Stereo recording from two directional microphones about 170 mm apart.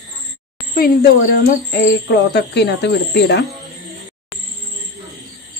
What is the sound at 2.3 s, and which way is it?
Speech, 80° left.